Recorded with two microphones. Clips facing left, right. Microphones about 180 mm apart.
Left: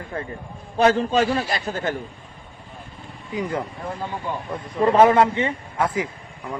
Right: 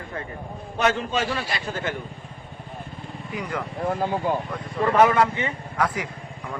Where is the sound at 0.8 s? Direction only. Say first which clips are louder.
Left 6 dB; 35° left (ahead or behind).